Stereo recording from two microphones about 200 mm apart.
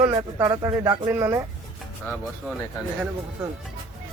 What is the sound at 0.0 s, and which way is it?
Speech, 15° right (ahead or behind).